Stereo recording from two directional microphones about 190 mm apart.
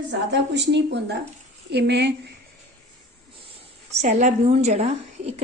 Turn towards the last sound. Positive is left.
turn(degrees=-35)  # may be behind; listen again after turning